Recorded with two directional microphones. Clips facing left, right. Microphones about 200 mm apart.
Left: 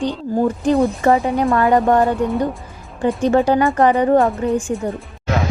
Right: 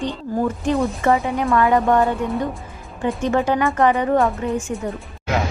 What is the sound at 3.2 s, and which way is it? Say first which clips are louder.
A woman's voice: left 4 dB; 35° left (ahead or behind).